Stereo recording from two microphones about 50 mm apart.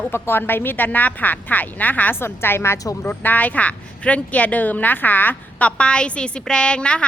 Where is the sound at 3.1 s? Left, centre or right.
Left.